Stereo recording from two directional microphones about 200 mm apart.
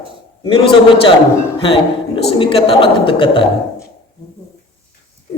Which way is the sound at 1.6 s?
25° left (ahead or behind).